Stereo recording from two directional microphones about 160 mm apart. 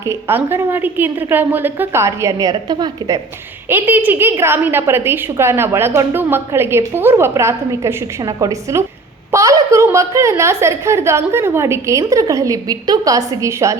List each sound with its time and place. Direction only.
0.0 s a woman's voice: 15° right (ahead or behind)
3.7 s a woman's voice: 15° right (ahead or behind)